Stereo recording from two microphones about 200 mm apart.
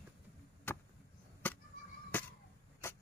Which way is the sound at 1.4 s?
10° left (ahead or behind).